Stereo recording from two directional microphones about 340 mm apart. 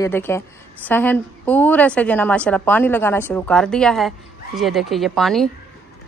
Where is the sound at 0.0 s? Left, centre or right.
Centre.